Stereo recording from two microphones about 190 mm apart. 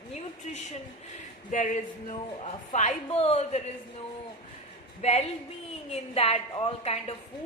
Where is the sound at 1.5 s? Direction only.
40° left (ahead or behind).